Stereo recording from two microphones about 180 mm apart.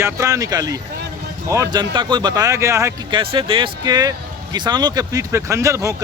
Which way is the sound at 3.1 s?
30° right (ahead or behind).